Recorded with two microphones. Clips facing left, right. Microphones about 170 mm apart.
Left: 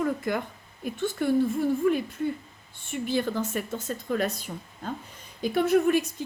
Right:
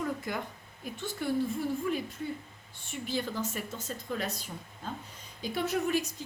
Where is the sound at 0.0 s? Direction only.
60° left (ahead or behind).